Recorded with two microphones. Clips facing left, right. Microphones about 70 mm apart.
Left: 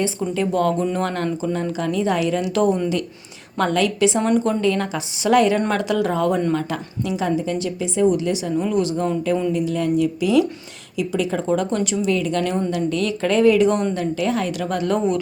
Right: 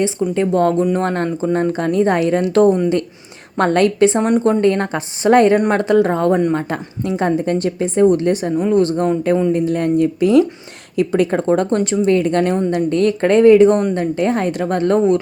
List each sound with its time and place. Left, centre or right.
0.3 s a woman's voice: right
4.2 s speech: right
4.6 s a woman's voice: right
7.2 s a woman's voice: right
11.8 s a woman's voice: right